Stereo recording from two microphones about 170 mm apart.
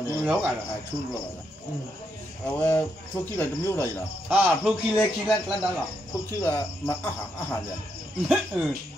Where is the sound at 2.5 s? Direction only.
10° left (ahead or behind).